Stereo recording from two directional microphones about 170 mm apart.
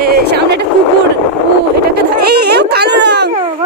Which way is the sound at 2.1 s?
70° right (ahead or behind).